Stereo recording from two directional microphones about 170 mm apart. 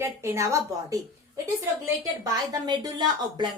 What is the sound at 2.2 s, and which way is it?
A woman's voice, 25° right (ahead or behind).